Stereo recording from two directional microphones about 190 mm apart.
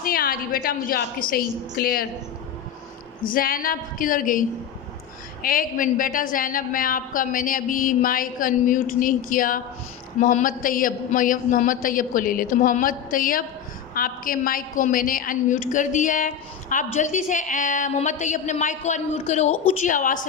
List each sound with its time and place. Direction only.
0.0 s a woman's voice: 50° left (ahead or behind)
3.2 s a woman's voice: 50° left (ahead or behind)